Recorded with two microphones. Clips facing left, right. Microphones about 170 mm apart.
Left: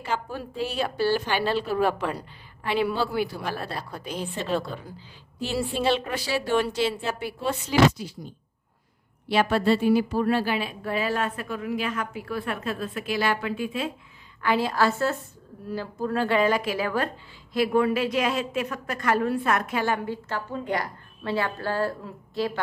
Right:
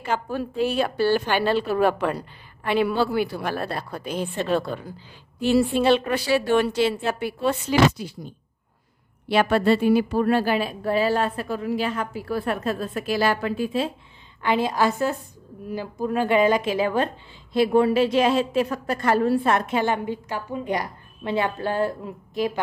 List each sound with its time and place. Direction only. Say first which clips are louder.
0.0 s a woman's voice: right 4 dB; 55° right (ahead or behind)
9.3 s speech: right 3 dB; 55° right (ahead or behind); by 13.9 s 35° right (ahead or behind)
14.4 s a woman's voice: right 2 dB; 20° right (ahead or behind)